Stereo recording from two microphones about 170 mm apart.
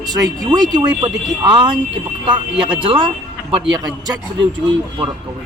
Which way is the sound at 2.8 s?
30° right (ahead or behind).